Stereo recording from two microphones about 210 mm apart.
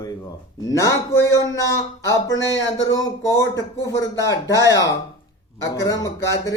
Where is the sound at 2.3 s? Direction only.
60° left (ahead or behind).